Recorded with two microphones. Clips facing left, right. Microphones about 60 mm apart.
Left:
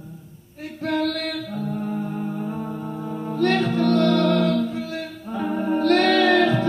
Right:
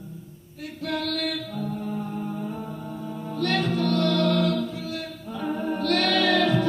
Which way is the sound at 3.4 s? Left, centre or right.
Left.